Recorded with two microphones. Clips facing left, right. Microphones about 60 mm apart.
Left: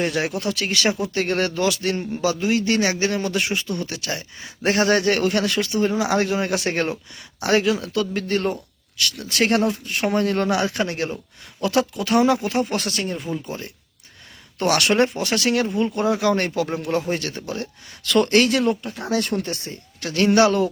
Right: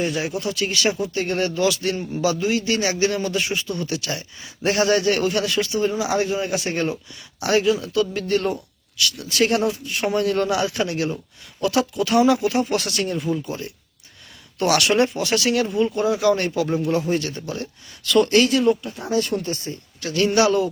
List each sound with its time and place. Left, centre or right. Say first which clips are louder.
0.0 s speech: left 1 dB; left
8.3 s speech: right 1 dB; left
18.9 s speech: right 1 dB; left
19.7 s speech: right 1 dB; left